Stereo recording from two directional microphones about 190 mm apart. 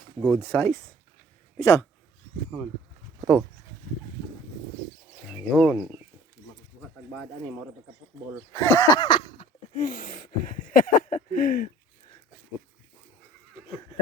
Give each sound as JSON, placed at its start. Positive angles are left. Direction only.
{"t": 0.2, "sound": "speech", "side_deg": 10}
{"t": 5.3, "sound": "speech", "side_deg": -5}
{"t": 8.6, "sound": "a sound", "side_deg": 15}